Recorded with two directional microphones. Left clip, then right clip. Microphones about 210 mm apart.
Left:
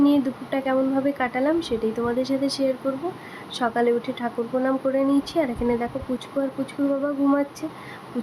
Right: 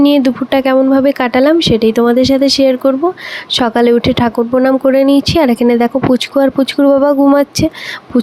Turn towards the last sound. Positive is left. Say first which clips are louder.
# right 13 dB
turn(degrees=-45)  # may be behind; listen again after turning